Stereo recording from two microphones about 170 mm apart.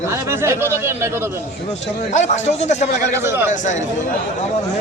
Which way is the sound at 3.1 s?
15° right (ahead or behind).